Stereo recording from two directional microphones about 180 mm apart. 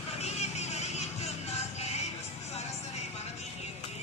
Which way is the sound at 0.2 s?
40° left (ahead or behind).